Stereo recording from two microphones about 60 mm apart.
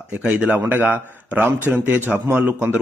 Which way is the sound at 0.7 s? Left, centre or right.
Right.